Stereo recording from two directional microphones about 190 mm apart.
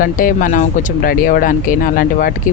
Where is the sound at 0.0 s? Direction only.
45° left (ahead or behind).